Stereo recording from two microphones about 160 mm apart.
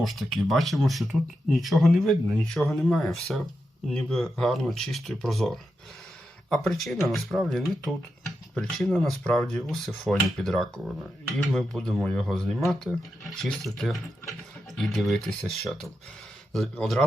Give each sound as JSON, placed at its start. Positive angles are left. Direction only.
{"t": 0.0, "sound": "speech", "side_deg": 0}